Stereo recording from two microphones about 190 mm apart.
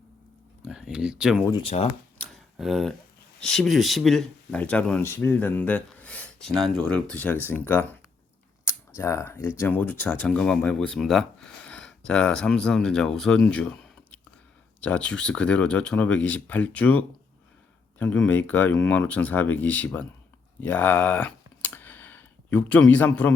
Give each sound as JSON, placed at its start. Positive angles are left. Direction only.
{"t": 0.6, "sound": "speech", "side_deg": -5}
{"t": 1.5, "sound": "speech", "side_deg": 20}
{"t": 2.1, "sound": "tick", "side_deg": 5}
{"t": 3.4, "sound": "speech", "side_deg": 5}
{"t": 9.0, "sound": "speech", "side_deg": 15}
{"t": 18.0, "sound": "speech", "side_deg": 10}
{"t": 20.6, "sound": "a sound", "side_deg": 10}